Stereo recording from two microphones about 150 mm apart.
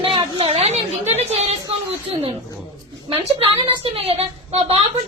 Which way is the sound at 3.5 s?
40° right (ahead or behind).